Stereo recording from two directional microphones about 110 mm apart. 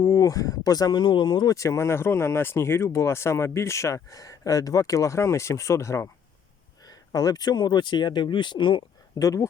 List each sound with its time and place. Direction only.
0.0 s speech: 30° left (ahead or behind)
1.5 s speech: 30° left (ahead or behind); by 8.8 s 45° left (ahead or behind)
9.1 s speech: 30° left (ahead or behind)